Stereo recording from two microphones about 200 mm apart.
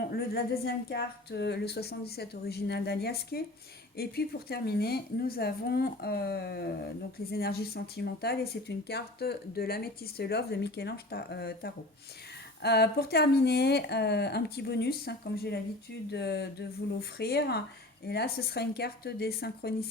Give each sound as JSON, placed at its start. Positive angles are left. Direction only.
{"t": 0.0, "sound": "speech", "side_deg": 50}